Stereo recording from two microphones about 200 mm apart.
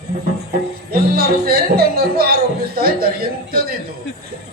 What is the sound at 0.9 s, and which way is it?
A man's voice, 50° right (ahead or behind).